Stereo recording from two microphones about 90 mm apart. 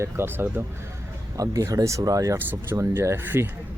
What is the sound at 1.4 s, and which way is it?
Speech, 40° right (ahead or behind).